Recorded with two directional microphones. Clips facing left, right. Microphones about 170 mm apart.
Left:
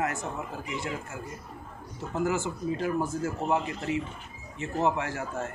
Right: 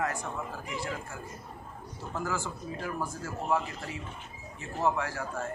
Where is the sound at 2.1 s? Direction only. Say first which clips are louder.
Left 6 dB; 20° left (ahead or behind).